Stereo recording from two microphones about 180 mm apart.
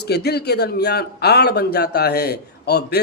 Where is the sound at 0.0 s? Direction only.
65° left (ahead or behind).